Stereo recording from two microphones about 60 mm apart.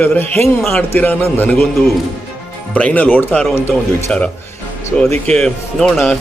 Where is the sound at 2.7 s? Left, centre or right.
Left.